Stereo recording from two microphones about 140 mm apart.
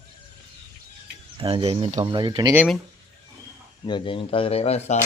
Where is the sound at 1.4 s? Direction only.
40° right (ahead or behind).